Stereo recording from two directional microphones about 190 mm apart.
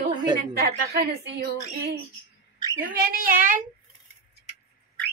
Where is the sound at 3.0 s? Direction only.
50° right (ahead or behind).